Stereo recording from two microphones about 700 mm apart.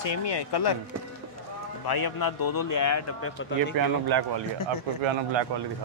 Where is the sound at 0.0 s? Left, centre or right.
Left.